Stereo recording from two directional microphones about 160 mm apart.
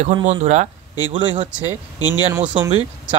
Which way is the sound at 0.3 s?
45° right (ahead or behind).